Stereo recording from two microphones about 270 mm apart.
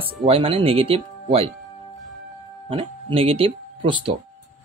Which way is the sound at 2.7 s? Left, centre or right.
Centre.